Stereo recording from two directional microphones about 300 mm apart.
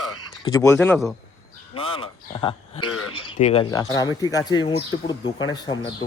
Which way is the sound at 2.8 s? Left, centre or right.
Left.